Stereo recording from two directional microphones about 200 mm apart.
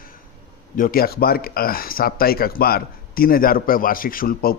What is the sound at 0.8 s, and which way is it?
Speech, 50° left (ahead or behind).